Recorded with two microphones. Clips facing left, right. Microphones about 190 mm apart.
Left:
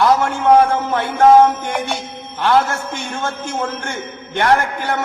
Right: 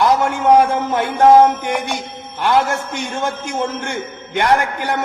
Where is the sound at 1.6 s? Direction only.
15° right (ahead or behind).